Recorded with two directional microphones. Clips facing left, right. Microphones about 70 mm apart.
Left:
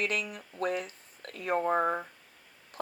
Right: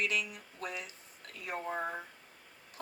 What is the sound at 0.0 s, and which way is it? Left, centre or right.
Speech, left.